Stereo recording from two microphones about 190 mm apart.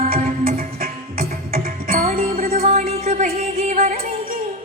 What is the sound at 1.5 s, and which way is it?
Music, 50° right (ahead or behind).